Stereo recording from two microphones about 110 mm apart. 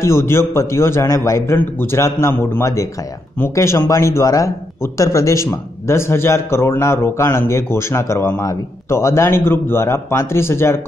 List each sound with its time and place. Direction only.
0.0 s speech: 25° left (ahead or behind)